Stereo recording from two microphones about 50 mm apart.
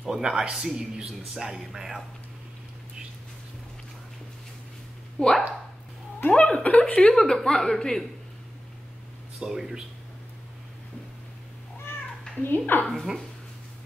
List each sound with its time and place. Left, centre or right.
0.1 s speech: centre
5.2 s a woman's voice: left
7.2 s a woman's voice: centre
9.5 s speech: centre
12.4 s a woman's voice: left
12.9 s speech: centre